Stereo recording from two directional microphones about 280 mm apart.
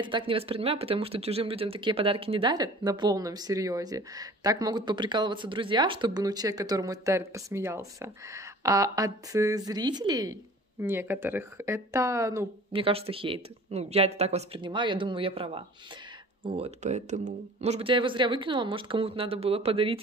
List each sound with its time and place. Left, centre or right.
0.0 s speech: centre